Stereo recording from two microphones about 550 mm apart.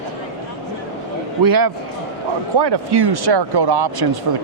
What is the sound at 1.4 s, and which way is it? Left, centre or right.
A man's voice, right.